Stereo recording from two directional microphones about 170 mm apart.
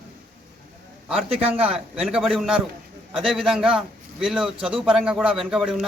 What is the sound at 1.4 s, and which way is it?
Speech, 35° right (ahead or behind).